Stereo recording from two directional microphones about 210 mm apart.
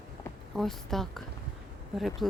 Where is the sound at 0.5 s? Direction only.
Centre (ahead or behind).